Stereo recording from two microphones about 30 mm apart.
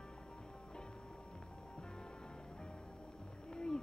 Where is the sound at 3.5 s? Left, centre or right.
Left.